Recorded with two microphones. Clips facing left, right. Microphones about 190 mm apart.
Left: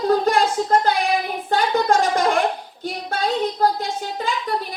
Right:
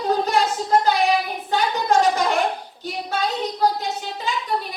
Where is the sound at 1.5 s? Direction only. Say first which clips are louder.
Left 1 dB; 50° left (ahead or behind).